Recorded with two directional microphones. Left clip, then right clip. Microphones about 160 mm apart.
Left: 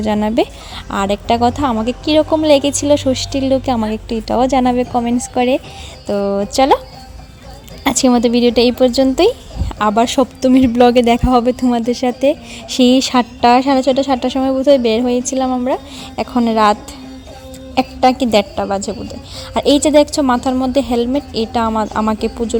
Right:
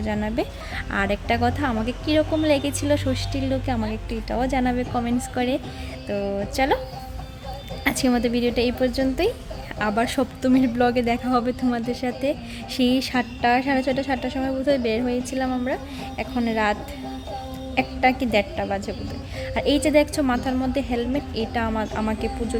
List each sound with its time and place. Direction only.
0.0 s speech: 45° left (ahead or behind)
0.9 s a woman's voice: 35° left (ahead or behind)
7.9 s speech: 40° left (ahead or behind)
17.7 s a woman's voice: 45° left (ahead or behind)